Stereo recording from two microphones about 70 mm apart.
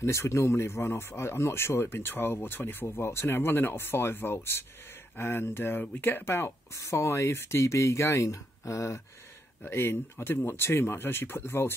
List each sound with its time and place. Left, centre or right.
0.0 s speech: left
9.6 s speech: left